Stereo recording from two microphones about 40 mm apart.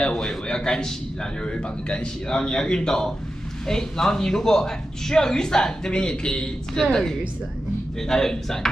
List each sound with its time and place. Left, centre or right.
0.1 s speech: centre